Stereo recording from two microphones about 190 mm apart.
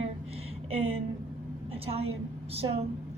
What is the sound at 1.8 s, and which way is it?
A woman's voice, 30° right (ahead or behind).